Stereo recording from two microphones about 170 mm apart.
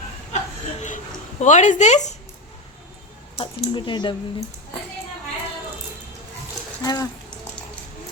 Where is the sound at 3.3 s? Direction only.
30° left (ahead or behind).